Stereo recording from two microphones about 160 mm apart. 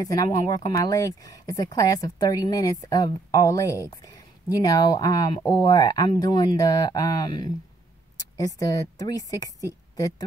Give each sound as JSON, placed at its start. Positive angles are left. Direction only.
{"t": 0.0, "sound": "a woman's voice", "side_deg": 20}